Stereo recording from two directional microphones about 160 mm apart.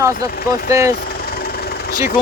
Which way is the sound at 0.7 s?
20° right (ahead or behind).